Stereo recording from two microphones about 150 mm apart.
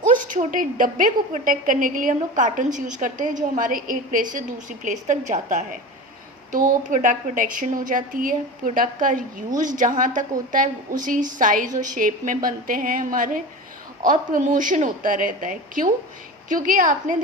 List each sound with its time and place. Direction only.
0.1 s a woman's voice: 65° right (ahead or behind)